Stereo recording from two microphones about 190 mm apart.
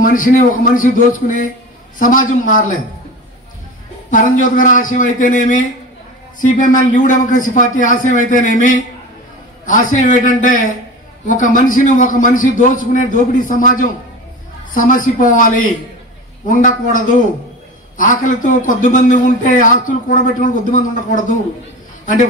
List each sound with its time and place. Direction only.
0.0 s a man's voice: 45° left (ahead or behind)
4.1 s a man's voice: 45° left (ahead or behind)